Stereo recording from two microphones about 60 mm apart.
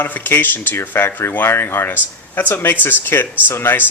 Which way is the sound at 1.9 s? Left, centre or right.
Left.